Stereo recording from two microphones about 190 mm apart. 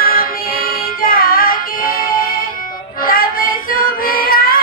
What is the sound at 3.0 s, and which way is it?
Child singing, 50° left (ahead or behind).